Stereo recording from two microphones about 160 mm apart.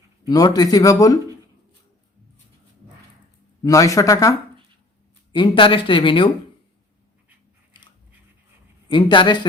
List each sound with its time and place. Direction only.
0.3 s speech: 25° left (ahead or behind)
3.6 s speech: 20° left (ahead or behind)
5.3 s speech: 30° left (ahead or behind)
8.9 s speech: 30° left (ahead or behind)